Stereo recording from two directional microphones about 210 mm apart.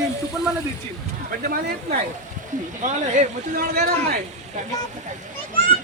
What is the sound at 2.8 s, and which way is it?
Speech, 35° right (ahead or behind).